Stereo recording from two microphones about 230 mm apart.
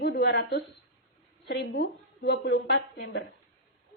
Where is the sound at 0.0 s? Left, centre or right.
Left.